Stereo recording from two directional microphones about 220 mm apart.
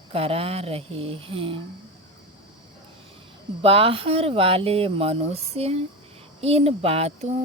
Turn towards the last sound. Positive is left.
turn(degrees=-25)  # may be behind; listen again after turning